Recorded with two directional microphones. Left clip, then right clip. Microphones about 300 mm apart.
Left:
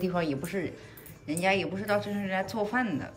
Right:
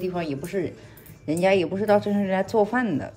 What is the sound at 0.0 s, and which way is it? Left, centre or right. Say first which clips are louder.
Speech: right 2 dB; centre.